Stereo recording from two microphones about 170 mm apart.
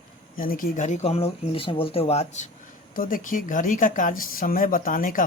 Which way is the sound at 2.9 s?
55° left (ahead or behind).